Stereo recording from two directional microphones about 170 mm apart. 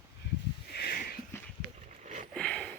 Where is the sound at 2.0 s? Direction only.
45° right (ahead or behind).